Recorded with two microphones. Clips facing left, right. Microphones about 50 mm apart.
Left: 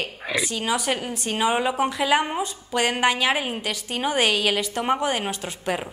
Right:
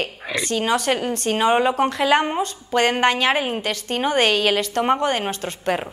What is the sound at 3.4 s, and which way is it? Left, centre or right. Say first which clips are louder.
A woman's voice: right 4 dB; centre.